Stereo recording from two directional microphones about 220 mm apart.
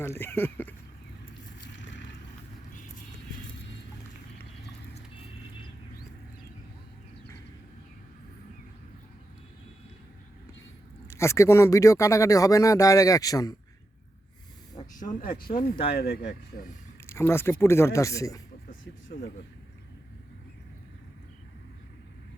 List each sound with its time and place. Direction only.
0.0 s speech: 10° left (ahead or behind)
1.7 s vehicle: 55° left (ahead or behind)
11.1 s speech: 15° left (ahead or behind)
14.9 s speech: 35° left (ahead or behind)
17.1 s speech: 10° left (ahead or behind)